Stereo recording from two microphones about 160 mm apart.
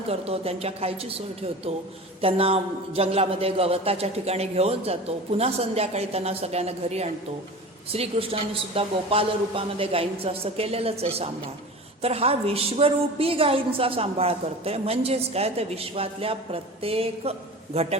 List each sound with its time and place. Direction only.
0.1 s a woman's voice: 40° right (ahead or behind)